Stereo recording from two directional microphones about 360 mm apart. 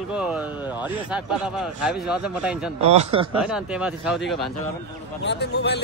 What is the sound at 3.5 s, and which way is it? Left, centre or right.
Speech, centre.